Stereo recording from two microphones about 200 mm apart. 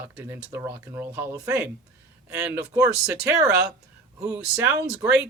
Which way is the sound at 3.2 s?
5° right (ahead or behind).